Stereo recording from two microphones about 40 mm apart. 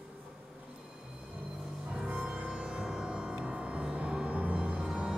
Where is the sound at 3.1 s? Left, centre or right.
Right.